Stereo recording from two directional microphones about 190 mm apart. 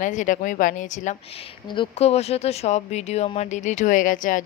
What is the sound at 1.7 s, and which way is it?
Speech, 30° left (ahead or behind).